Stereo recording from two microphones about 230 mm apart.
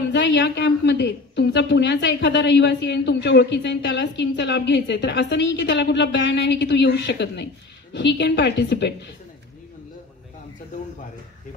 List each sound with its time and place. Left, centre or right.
0.1 s a woman's voice: left